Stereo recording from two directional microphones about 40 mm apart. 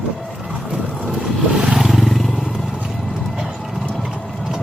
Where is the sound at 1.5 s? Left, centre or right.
Centre.